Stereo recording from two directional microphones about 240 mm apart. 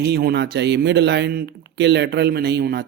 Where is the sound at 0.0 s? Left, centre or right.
Right.